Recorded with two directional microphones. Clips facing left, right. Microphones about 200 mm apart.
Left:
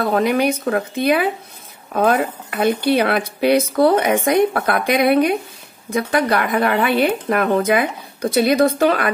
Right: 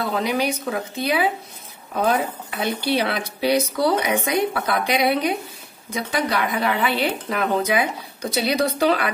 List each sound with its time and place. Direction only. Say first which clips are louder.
0.0 s speech: left 6 dB; 55° left (ahead or behind)